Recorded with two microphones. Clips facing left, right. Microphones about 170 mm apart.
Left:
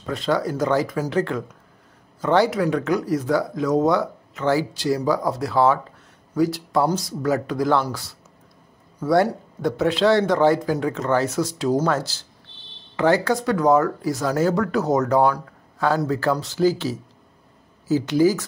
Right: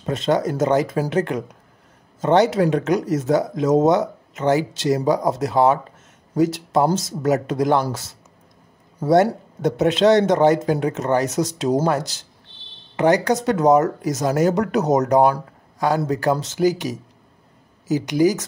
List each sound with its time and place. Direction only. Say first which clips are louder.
0.0 s speech: right 3 dB; 20° right (ahead or behind)
2.2 s speech: right 3 dB; 20° right (ahead or behind)